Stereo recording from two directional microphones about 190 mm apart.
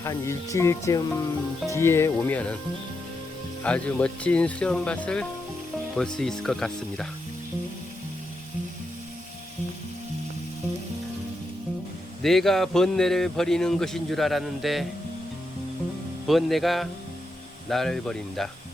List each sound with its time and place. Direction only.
0.0 s speech: 15° left (ahead or behind)
3.6 s a man's voice: 5° left (ahead or behind)
12.2 s a man's voice: centre (ahead or behind)
16.2 s a man's voice: centre (ahead or behind)